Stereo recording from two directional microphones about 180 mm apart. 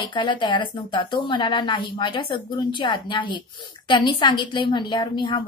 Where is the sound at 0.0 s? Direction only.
25° left (ahead or behind).